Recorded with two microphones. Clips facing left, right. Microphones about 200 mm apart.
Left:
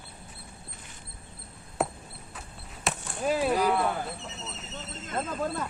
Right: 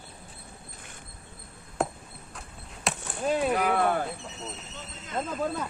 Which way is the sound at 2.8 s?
5° left (ahead or behind).